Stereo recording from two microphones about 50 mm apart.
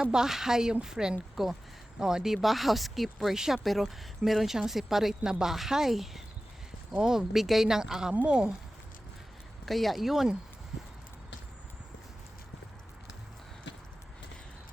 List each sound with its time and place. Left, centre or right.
0.0 s speech: centre
8.1 s speech: right
9.6 s speech: centre